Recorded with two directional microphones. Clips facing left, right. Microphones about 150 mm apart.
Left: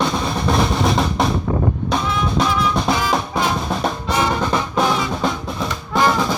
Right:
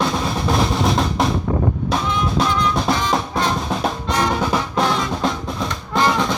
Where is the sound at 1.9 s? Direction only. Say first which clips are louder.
Even; centre (ahead or behind).